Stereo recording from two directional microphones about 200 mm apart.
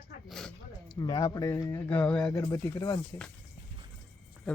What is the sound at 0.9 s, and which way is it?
Speech, 20° left (ahead or behind).